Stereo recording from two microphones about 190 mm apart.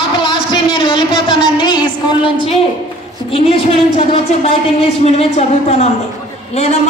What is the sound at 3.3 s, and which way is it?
A woman's voice, 30° left (ahead or behind).